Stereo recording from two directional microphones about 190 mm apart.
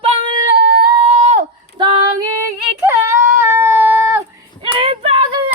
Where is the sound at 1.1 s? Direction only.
35° right (ahead or behind).